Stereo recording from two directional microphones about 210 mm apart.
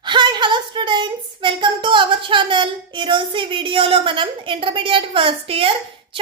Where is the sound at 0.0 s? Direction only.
20° right (ahead or behind).